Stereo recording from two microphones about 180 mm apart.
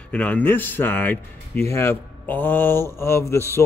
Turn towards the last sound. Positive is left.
turn(degrees=15)  # may be behind; listen again after turning